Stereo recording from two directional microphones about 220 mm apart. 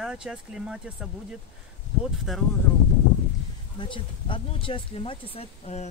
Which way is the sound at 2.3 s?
Centre (ahead or behind).